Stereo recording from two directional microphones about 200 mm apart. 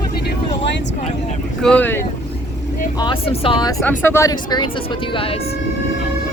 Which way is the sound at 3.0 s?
25° left (ahead or behind).